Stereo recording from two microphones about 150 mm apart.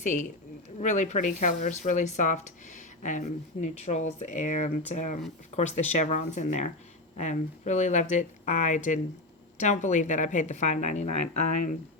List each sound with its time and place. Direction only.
0.0 s a woman's voice: 55° left (ahead or behind)